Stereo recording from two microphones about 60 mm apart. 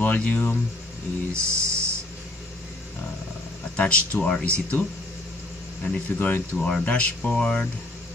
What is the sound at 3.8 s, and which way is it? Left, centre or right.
Speech, left.